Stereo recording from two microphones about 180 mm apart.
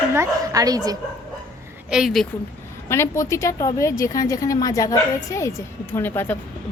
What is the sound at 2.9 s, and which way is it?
A woman's voice, 15° left (ahead or behind).